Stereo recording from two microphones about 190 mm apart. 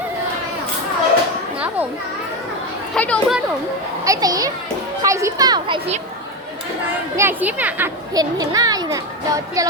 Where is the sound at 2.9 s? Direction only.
5° left (ahead or behind).